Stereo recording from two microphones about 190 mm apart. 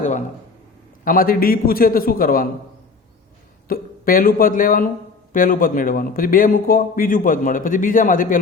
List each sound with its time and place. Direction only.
1.0 s a man's voice: 50° left (ahead or behind)
3.7 s a man's voice: 50° left (ahead or behind)